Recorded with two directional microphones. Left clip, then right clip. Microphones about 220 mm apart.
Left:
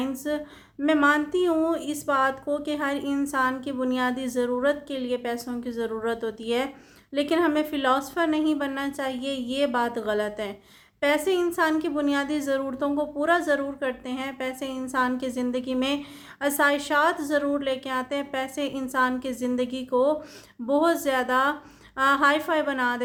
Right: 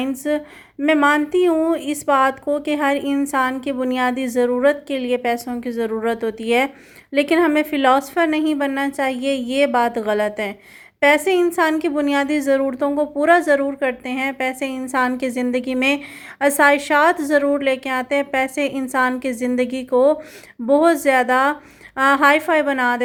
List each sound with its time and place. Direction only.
0.0 s speech: 25° right (ahead or behind)